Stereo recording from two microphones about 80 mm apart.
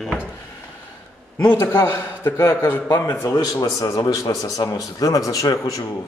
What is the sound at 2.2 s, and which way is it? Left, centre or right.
Speech, left.